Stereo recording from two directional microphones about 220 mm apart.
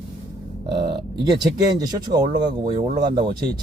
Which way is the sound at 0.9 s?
20° right (ahead or behind).